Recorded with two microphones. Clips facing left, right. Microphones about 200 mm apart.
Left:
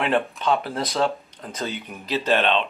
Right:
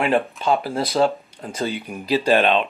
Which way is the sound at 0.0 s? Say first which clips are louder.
Right 2 dB; 5° right (ahead or behind).